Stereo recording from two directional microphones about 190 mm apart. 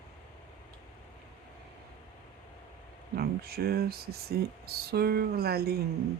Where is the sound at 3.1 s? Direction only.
55° right (ahead or behind).